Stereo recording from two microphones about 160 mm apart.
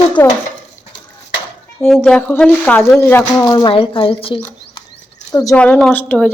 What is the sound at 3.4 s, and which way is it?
Speech, 25° left (ahead or behind).